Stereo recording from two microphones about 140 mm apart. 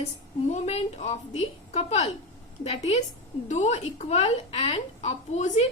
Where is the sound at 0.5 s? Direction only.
50° left (ahead or behind).